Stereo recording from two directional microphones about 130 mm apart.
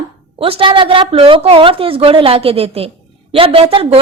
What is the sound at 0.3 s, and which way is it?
A woman's voice, 45° right (ahead or behind).